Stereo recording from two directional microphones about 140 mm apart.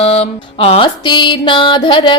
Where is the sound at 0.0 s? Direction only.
45° left (ahead or behind).